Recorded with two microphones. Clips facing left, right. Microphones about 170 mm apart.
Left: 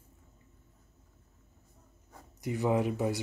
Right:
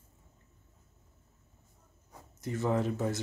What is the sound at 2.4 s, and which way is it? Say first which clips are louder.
Speech: left 2 dB; 15° left (ahead or behind).